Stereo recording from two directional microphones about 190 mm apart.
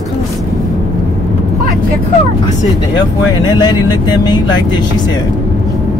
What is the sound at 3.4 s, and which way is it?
Speech, 20° left (ahead or behind).